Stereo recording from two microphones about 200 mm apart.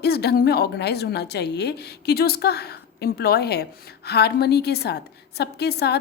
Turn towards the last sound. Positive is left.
turn(degrees=55)  # may be behind; listen again after turning